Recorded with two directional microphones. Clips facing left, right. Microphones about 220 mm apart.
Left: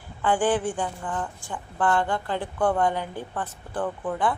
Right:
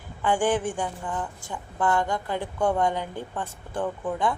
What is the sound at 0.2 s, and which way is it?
A woman's voice, 15° right (ahead or behind).